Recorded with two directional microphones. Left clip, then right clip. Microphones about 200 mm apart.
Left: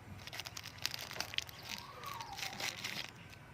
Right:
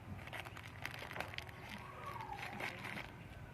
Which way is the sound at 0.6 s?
5° left (ahead or behind).